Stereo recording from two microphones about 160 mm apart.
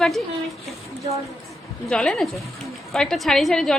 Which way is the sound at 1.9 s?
5° left (ahead or behind).